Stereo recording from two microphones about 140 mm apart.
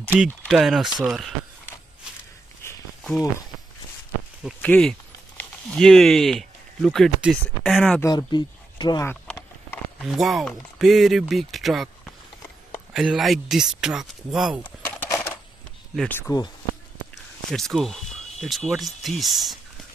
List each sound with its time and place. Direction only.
0.1 s speech: 5° right (ahead or behind)
2.6 s walk: 15° left (ahead or behind)
3.0 s a sound: centre (ahead or behind)
4.6 s speech: 10° left (ahead or behind)
8.0 s speech: 30° left (ahead or behind)
9.0 s a sound: 15° left (ahead or behind)
10.0 s speech: centre (ahead or behind)
12.9 s speech: 5° right (ahead or behind)
14.6 s a sound: 15° left (ahead or behind)
16.1 s speech: 15° left (ahead or behind)
17.5 s speech: 5° left (ahead or behind)